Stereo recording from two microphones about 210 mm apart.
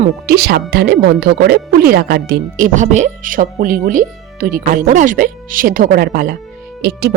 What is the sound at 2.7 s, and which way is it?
Speech, 35° right (ahead or behind).